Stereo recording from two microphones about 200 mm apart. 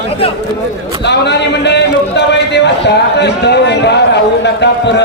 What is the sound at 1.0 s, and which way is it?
A man's voice, 60° left (ahead or behind).